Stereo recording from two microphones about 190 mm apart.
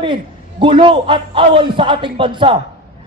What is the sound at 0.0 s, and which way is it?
A man's voice, 25° right (ahead or behind).